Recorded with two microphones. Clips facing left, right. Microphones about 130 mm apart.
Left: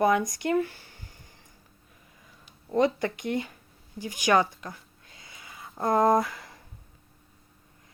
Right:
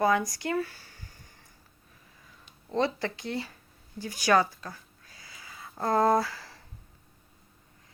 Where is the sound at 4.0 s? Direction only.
15° left (ahead or behind).